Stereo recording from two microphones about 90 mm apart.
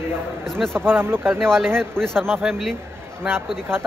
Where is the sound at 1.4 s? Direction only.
5° left (ahead or behind).